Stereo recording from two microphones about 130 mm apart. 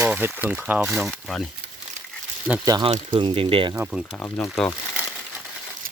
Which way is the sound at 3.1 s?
40° right (ahead or behind).